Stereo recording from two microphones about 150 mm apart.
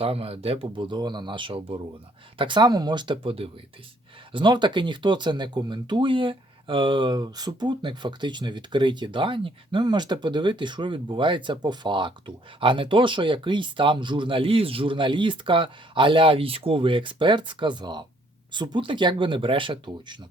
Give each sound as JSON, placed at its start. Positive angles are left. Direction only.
{"t": 0.0, "sound": "speech", "side_deg": -40}